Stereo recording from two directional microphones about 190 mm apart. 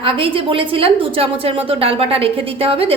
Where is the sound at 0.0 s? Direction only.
30° right (ahead or behind).